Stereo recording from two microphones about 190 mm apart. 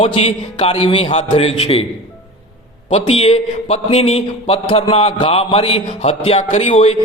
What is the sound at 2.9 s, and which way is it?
A man's voice, 30° left (ahead or behind).